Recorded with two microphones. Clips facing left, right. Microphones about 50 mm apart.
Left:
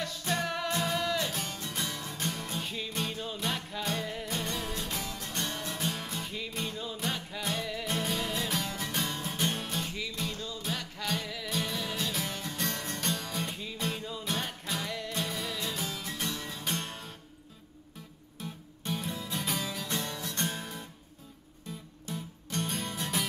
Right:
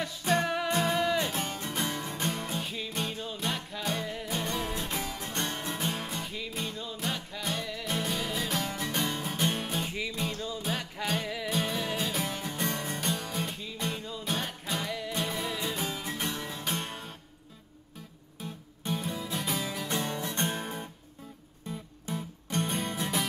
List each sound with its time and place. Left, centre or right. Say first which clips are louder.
0.0 s music: right 4 dB; centre
2.6 s music: right 1 dB; centre; by 5.7 s right
5.7 s music: right 2 dB; centre
6.1 s music: right 1 dB; centre
18.4 s music: right 1 dB; centre; by 20.9 s right
22.0 s music: right 3 dB; right
22.9 s music: right 1 dB; centre